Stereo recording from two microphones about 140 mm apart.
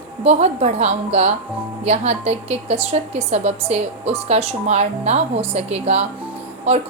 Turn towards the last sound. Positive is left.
turn(degrees=-50)  # may be behind; listen again after turning